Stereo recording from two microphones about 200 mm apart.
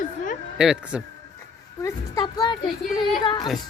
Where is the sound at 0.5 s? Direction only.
5° right (ahead or behind).